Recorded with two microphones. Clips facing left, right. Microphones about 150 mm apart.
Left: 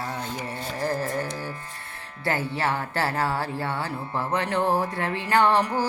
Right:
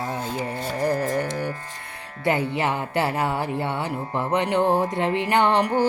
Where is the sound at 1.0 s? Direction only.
90° right.